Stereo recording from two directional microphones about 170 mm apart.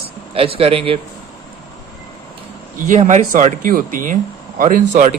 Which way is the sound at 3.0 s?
45° right (ahead or behind).